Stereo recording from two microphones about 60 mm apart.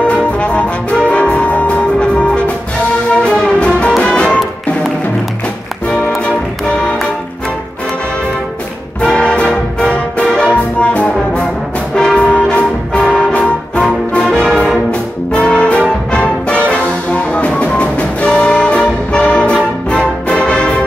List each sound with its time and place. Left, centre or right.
0.0 s brass instrument: centre
3.2 s music: centre
9.0 s music: centre